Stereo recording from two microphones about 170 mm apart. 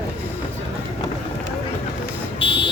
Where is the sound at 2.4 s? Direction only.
30° left (ahead or behind).